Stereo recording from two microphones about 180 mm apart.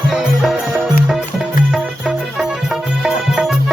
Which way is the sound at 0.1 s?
Centre (ahead or behind).